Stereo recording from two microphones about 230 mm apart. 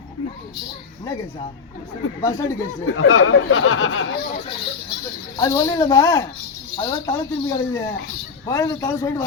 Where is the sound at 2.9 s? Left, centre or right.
Left.